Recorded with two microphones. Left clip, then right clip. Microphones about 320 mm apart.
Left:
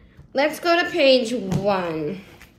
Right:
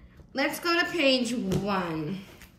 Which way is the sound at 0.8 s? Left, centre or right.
Centre.